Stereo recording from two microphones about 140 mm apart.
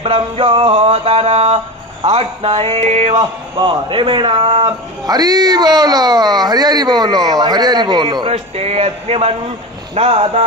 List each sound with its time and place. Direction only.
0.0 s music: 40° right (ahead or behind)
3.2 s a man's voice: 35° right (ahead or behind)
5.0 s speech: 30° right (ahead or behind); by 9.3 s 45° right (ahead or behind)
9.9 s music: 45° right (ahead or behind)